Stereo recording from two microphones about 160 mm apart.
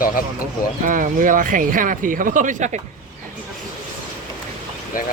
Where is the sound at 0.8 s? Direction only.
55° right (ahead or behind).